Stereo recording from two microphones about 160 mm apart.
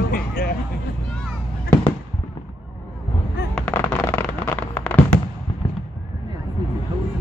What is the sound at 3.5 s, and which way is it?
Fireworks, 10° left (ahead or behind).